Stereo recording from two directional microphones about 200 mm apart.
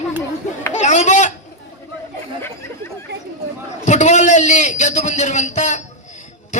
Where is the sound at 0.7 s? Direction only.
35° left (ahead or behind).